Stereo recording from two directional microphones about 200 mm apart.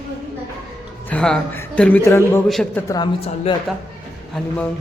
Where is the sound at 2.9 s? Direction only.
25° left (ahead or behind).